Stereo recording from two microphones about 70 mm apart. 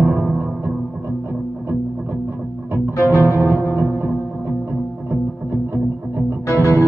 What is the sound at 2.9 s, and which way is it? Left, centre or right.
Music, left.